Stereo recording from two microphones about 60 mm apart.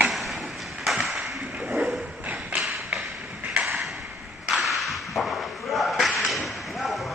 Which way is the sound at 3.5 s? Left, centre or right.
Right.